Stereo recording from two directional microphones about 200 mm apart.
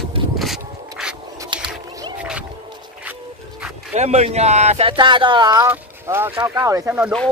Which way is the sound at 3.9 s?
35° right (ahead or behind).